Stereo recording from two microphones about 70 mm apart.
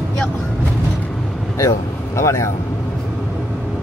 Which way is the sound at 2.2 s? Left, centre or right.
Left.